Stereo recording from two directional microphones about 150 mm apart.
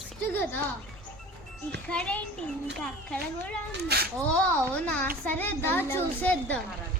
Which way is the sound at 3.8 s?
90° right.